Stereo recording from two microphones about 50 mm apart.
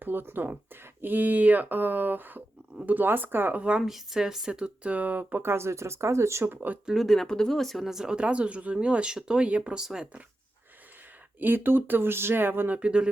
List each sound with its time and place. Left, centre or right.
0.0 s speech: right
3.6 s speech: right
3.8 s speech: centre
4.5 s speech: right
5.4 s speech: right
6.4 s speech: right
6.9 s speech: centre
7.9 s speech: centre
9.5 s speech: right
9.7 s speech: centre
11.3 s speech: right
12.8 s speech: centre